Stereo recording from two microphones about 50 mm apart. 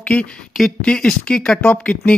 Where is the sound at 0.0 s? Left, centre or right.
Left.